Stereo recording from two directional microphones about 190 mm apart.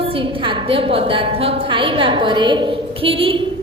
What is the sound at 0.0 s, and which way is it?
A woman's voice, 30° right (ahead or behind).